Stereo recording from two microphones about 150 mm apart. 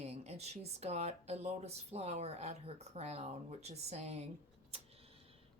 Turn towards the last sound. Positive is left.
turn(degrees=-45)  # may be behind; listen again after turning